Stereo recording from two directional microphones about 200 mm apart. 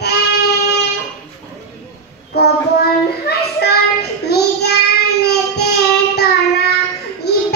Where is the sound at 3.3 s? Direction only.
55° left (ahead or behind).